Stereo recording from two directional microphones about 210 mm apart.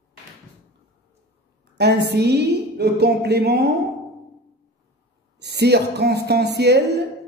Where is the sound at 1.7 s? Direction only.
50° right (ahead or behind).